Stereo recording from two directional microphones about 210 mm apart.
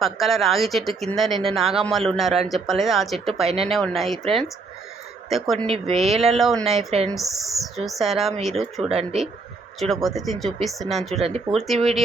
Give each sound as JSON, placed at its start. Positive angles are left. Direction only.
{"t": 0.0, "sound": "speech", "side_deg": 0}
{"t": 3.4, "sound": "speech", "side_deg": -30}
{"t": 3.7, "sound": "speech", "side_deg": 0}
{"t": 5.3, "sound": "speech", "side_deg": 0}
{"t": 5.6, "sound": "speech", "side_deg": -30}
{"t": 5.9, "sound": "speech", "side_deg": 0}
{"t": 11.1, "sound": "speech", "side_deg": -30}
{"t": 11.5, "sound": "speech", "side_deg": 0}